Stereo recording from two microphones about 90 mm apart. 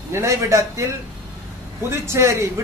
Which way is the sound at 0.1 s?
35° right (ahead or behind).